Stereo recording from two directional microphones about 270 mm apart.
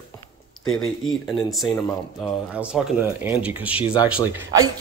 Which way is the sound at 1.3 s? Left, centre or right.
Centre.